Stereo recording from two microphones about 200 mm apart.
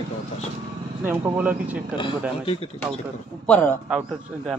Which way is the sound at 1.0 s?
10° right (ahead or behind).